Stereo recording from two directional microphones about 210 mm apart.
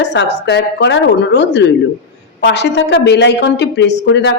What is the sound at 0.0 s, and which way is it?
A woman's voice, 55° left (ahead or behind).